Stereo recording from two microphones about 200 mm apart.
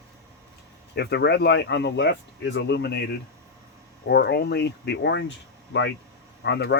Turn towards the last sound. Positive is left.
turn(degrees=60)  # may be behind; listen again after turning